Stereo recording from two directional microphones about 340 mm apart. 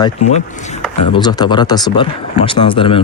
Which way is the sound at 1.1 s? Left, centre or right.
Centre.